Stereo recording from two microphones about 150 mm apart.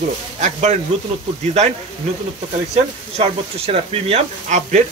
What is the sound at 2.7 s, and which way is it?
Speech, 45° right (ahead or behind).